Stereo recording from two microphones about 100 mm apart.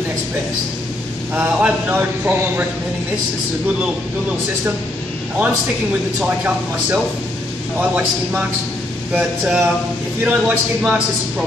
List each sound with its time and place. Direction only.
1.6 s speech: 15° right (ahead or behind)
6.2 s a man's voice: 15° right (ahead or behind)